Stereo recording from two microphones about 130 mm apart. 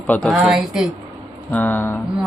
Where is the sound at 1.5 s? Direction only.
15° left (ahead or behind).